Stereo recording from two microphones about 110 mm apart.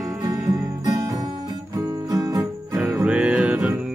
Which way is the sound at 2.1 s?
35° right (ahead or behind).